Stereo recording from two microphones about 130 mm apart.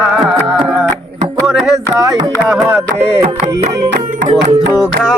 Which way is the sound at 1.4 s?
Centre (ahead or behind).